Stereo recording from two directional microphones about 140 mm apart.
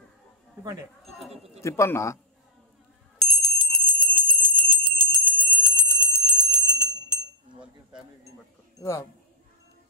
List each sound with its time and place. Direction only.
1.0 s speech: centre (ahead or behind)
1.3 s speech: 45° right (ahead or behind)
1.6 s a man's voice: 20° left (ahead or behind)
3.2 s bicycle bell: centre (ahead or behind)
4.1 s clock: 5° left (ahead or behind)
8.7 s speech: 20° left (ahead or behind)